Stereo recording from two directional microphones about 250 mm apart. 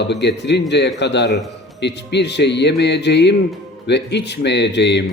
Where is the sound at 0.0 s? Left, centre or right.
Left.